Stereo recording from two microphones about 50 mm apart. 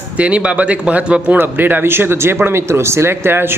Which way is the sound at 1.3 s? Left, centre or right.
Right.